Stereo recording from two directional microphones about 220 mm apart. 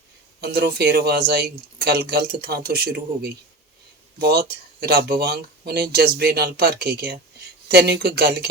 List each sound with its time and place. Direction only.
0.4 s speech: 45° right (ahead or behind)